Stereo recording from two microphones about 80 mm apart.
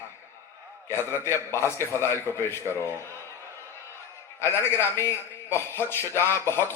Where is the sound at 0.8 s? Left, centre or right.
Left.